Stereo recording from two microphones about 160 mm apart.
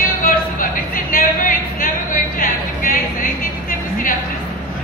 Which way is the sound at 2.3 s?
65° left (ahead or behind).